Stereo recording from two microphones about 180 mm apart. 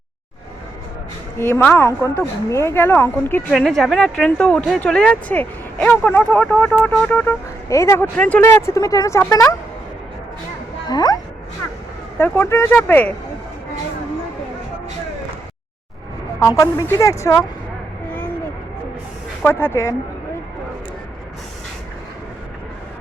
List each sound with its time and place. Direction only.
1.4 s speech: 15° left (ahead or behind)
3.5 s speech: centre (ahead or behind); by 9.6 s 20° left (ahead or behind)
10.8 s speech: 20° left (ahead or behind)
12.2 s speech: 15° left (ahead or behind)
16.4 s speech: 15° left (ahead or behind)
19.4 s speech: 10° left (ahead or behind)